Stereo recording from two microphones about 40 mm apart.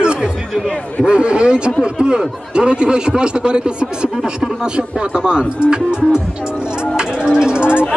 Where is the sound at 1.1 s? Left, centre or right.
Right.